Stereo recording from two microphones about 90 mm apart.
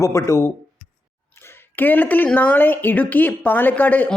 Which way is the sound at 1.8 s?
20° left (ahead or behind).